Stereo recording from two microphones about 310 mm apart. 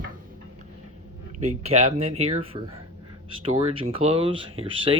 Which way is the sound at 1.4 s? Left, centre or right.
Right.